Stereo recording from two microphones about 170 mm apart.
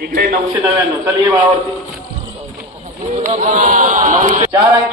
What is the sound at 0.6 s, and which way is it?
Speech, 20° right (ahead or behind).